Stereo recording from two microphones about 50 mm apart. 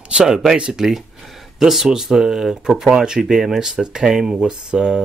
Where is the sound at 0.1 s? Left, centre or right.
Centre.